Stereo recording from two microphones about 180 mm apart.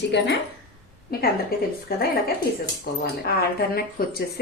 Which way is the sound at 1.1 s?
55° left (ahead or behind).